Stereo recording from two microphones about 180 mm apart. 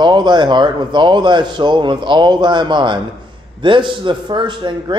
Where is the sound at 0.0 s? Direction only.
25° right (ahead or behind).